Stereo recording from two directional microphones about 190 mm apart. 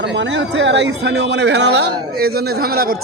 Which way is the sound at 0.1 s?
70° right (ahead or behind).